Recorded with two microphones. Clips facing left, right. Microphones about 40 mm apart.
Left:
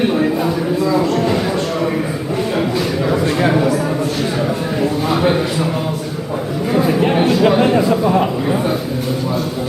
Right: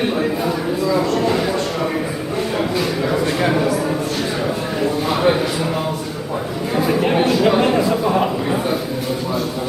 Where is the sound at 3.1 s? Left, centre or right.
Centre.